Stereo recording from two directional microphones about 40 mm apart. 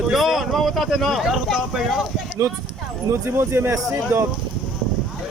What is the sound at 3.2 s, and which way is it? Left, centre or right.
Speech, right.